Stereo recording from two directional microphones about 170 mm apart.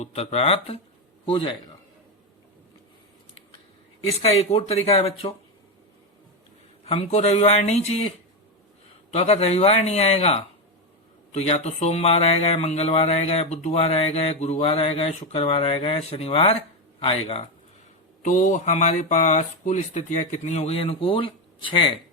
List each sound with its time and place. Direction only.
0.0 s a man's voice: 40° left (ahead or behind)
4.4 s speech: 35° left (ahead or behind)
6.8 s speech: 40° left (ahead or behind)
9.1 s speech: 40° left (ahead or behind)
18.2 s speech: 50° left (ahead or behind); by 21.9 s 30° left (ahead or behind)